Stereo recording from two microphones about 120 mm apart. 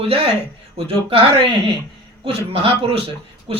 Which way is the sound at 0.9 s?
50° right (ahead or behind).